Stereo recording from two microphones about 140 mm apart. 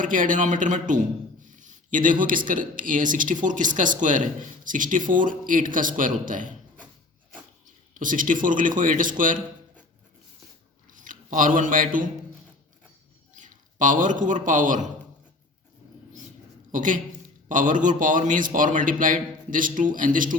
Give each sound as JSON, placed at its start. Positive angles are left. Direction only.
{"t": 0.0, "sound": "speech", "side_deg": -70}
{"t": 7.9, "sound": "speech", "side_deg": -70}
{"t": 10.9, "sound": "speech", "side_deg": -70}
{"t": 13.3, "sound": "a man's voice", "side_deg": -65}
{"t": 16.7, "sound": "speech", "side_deg": -70}